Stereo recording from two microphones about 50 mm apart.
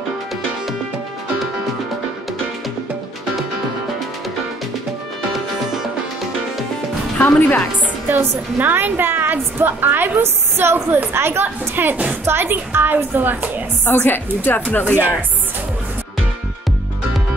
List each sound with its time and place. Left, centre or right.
7.2 s a woman's voice: left
8.5 s a woman's voice: right
12.3 s a woman's voice: right
13.8 s a woman's voice: left